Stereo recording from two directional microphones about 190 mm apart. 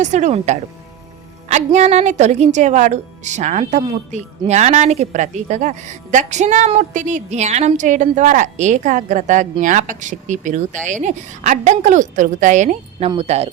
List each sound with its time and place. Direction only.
0.0 s a woman's voice: 40° right (ahead or behind)